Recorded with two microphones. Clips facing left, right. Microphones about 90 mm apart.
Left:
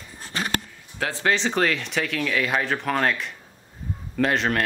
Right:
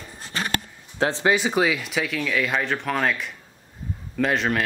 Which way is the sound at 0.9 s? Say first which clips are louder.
Right 3 dB; 25° right (ahead or behind).